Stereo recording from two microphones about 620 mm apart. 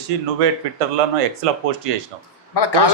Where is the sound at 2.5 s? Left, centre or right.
Left.